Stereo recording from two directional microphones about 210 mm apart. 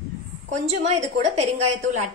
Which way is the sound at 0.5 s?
30° right (ahead or behind).